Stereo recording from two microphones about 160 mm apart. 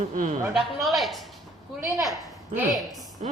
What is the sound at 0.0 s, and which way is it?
Speech, 50° right (ahead or behind).